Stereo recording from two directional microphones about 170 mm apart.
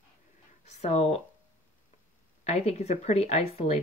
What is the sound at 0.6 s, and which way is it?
Speech, 40° left (ahead or behind).